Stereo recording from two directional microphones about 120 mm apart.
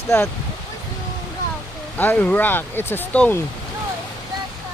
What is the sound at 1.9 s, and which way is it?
Speech, 15° left (ahead or behind).